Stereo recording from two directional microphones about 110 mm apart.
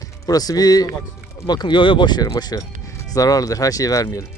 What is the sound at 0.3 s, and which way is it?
Speech, 35° left (ahead or behind).